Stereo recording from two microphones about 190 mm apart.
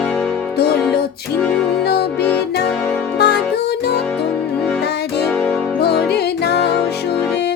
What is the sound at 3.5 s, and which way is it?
Music, 60° left (ahead or behind).